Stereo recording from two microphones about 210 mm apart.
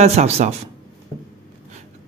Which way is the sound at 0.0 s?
30° right (ahead or behind).